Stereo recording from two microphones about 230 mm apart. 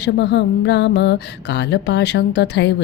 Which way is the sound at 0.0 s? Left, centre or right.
Left.